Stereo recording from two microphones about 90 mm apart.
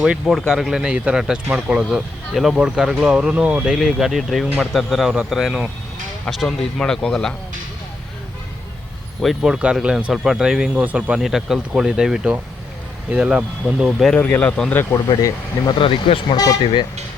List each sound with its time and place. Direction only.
0.0 s a man's voice: centre (ahead or behind)
3.6 s a man's voice: 5° right (ahead or behind)
9.2 s speech: 5° right (ahead or behind)
14.1 s speech: 15° left (ahead or behind)
15.2 s speech: 55° left (ahead or behind); by 16.2 s 85° left
16.3 s speech: 40° left (ahead or behind)